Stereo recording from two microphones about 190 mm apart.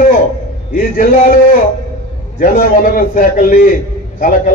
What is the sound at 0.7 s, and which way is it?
A man's voice, 45° left (ahead or behind).